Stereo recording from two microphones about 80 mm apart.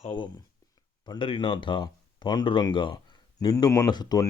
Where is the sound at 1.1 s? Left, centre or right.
Left.